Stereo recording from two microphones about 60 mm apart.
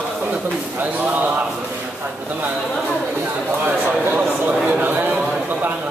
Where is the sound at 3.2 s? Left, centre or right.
Right.